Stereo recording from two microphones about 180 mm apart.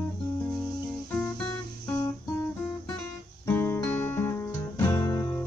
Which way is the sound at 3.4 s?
10° left (ahead or behind).